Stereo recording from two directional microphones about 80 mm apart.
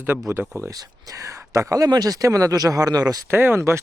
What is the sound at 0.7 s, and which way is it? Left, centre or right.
Speech, right.